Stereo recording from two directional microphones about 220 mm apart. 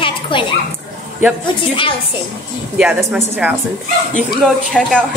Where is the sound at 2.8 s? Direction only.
5° right (ahead or behind).